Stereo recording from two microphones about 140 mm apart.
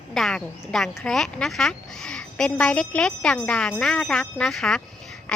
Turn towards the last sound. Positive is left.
turn(degrees=5)  # may be behind; listen again after turning